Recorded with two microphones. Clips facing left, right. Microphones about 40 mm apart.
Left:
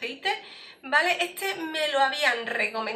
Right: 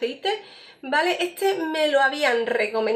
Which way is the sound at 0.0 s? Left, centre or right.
Left.